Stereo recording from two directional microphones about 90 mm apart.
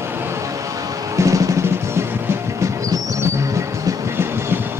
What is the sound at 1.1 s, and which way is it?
Music, 35° right (ahead or behind).